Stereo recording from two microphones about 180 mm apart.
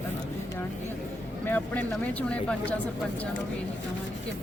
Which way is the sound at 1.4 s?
10° left (ahead or behind).